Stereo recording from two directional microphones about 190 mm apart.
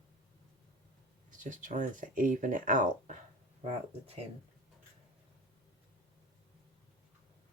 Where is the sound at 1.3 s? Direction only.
45° right (ahead or behind).